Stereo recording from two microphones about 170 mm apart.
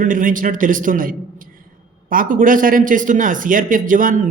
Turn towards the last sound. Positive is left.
turn(degrees=-50)  # may be behind; listen again after turning